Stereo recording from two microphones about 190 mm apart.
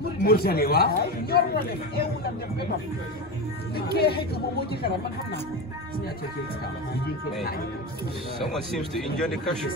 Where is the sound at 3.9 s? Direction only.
55° left (ahead or behind).